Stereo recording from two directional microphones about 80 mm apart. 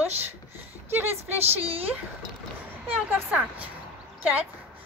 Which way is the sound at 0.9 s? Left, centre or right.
Right.